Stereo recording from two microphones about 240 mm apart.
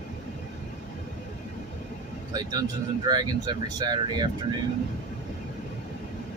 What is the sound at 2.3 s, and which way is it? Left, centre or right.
Speech, centre.